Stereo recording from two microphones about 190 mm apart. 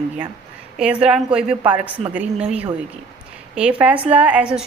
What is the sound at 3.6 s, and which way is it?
A woman's voice, 5° right (ahead or behind).